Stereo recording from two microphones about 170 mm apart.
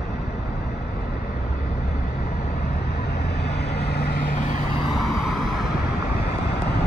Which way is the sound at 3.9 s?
70° left (ahead or behind).